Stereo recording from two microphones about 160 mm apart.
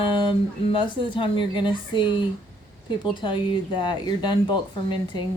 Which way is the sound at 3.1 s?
30° left (ahead or behind).